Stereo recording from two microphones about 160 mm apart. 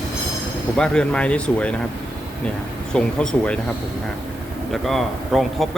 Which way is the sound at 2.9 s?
5° left (ahead or behind).